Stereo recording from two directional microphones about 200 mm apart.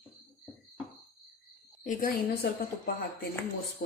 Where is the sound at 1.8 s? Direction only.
40° left (ahead or behind).